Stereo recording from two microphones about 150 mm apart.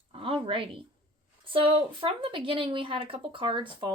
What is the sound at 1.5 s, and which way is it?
Speech, 35° right (ahead or behind).